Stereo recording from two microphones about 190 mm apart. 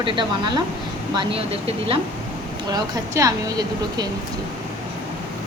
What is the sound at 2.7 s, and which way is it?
Speech, 20° right (ahead or behind).